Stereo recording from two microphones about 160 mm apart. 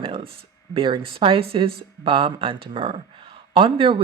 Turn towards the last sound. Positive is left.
turn(degrees=-35)  # may be behind; listen again after turning